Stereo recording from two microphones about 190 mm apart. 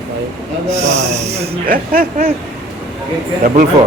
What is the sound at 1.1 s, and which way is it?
Speech, 35° right (ahead or behind).